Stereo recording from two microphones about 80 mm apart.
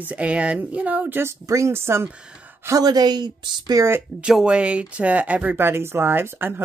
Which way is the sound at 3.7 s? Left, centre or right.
Right.